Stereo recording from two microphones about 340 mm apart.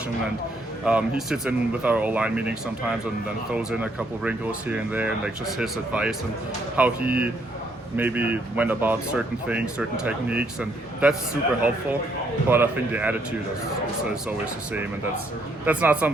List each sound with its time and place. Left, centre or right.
0.9 s speech: centre
12.5 s speech: centre
14.3 s speech: centre